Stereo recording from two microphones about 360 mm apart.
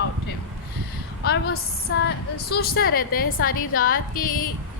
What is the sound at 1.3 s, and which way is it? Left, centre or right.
A woman's voice, left.